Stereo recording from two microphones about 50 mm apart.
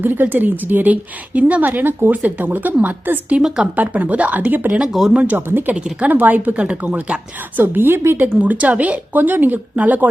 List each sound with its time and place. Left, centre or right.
0.0 s a woman's voice: right
2.1 s a woman's voice: right
4.9 s speech: centre
5.1 s speech: right
5.5 s speech: right
5.7 s speech: right
6.1 s a woman's voice: right
8.3 s a woman's voice: right